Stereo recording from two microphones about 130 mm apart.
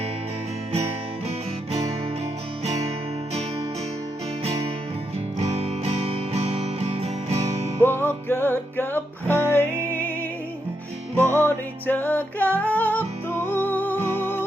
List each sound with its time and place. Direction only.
5.4 s music: 55° right (ahead or behind)
7.8 s music: 15° left (ahead or behind)
11.2 s music: 20° right (ahead or behind)
11.4 s music: 15° left (ahead or behind)